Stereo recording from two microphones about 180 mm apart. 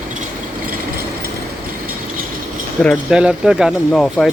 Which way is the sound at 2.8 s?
Centre (ahead or behind).